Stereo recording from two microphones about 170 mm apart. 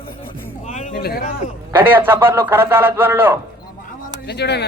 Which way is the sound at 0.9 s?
65° left (ahead or behind).